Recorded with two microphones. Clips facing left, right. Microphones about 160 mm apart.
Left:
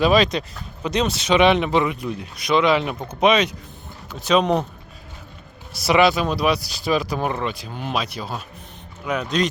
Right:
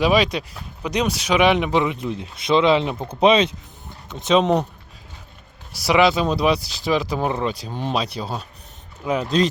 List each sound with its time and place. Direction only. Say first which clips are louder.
0.0 s speech: left 1 dB; 10° right (ahead or behind)
5.8 s speech: even; 15° right (ahead or behind)
7.4 s speech: right 3 dB; 35° right (ahead or behind)